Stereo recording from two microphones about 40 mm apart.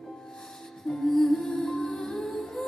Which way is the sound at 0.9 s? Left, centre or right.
Centre.